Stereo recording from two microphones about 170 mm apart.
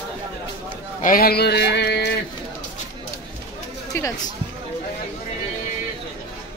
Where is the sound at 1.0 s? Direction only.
55° left (ahead or behind); by 2.1 s 75° left (ahead or behind).